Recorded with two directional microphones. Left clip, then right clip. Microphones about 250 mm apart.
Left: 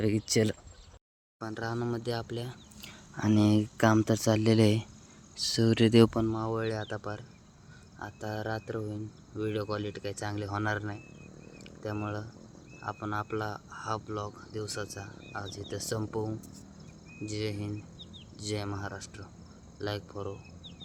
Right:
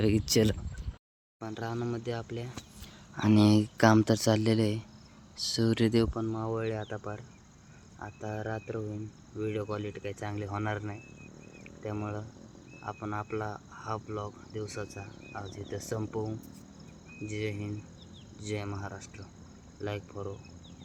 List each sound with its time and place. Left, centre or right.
0.0 s speech: centre
1.4 s speech: centre
3.2 s speech: centre
4.6 s speech: centre
5.4 s speech: centre